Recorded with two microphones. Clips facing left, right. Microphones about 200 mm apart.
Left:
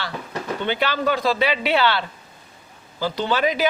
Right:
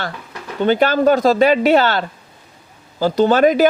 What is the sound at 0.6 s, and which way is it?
A man's voice, 45° right (ahead or behind).